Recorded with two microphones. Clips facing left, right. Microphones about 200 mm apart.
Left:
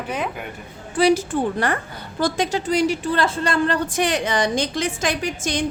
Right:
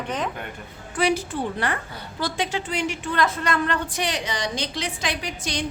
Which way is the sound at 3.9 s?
50° left (ahead or behind).